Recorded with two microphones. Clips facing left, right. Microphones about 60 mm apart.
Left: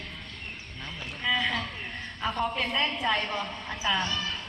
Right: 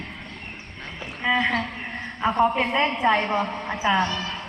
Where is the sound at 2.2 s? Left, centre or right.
Right.